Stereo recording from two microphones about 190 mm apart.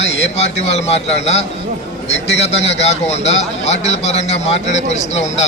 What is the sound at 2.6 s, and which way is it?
Speech, 35° left (ahead or behind).